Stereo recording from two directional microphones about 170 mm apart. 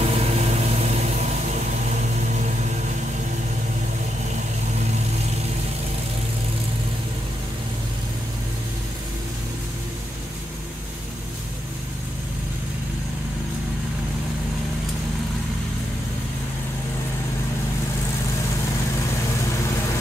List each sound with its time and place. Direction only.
0.0 s vehicle: 40° right (ahead or behind)